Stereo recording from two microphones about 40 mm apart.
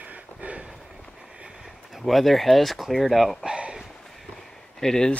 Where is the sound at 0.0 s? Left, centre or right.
Right.